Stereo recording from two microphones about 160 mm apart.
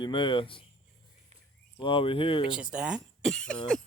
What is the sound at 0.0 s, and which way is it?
Speech, 30° left (ahead or behind).